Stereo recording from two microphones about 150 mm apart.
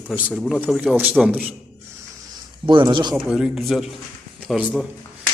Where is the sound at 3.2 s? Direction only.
5° right (ahead or behind).